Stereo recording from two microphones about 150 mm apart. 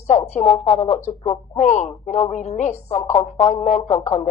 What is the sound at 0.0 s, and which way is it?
Speech, 50° left (ahead or behind).